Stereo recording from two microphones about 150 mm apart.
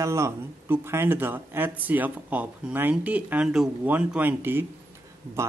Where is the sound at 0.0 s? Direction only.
20° right (ahead or behind).